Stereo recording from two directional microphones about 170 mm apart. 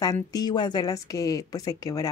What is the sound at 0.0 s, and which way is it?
Speech, 20° left (ahead or behind).